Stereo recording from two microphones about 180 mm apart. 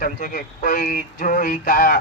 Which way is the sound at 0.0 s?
50° left (ahead or behind).